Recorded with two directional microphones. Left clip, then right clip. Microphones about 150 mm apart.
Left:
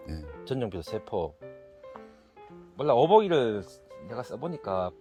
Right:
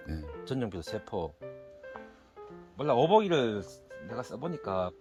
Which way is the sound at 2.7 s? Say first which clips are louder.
Left 4 dB; 50° left (ahead or behind).